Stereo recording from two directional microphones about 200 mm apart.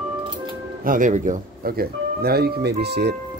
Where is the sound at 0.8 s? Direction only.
40° right (ahead or behind).